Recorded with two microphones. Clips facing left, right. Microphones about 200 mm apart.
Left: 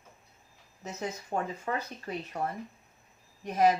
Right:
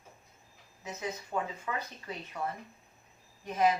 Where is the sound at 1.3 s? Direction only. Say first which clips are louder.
Left 4 dB; 40° left (ahead or behind).